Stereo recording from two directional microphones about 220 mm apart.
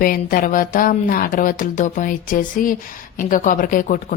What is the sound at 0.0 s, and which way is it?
Speech, 40° left (ahead or behind).